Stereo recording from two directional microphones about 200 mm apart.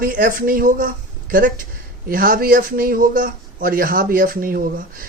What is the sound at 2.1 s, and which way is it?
Speech, 45° right (ahead or behind).